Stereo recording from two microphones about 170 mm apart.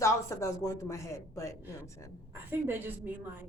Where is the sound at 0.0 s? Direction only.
15° left (ahead or behind).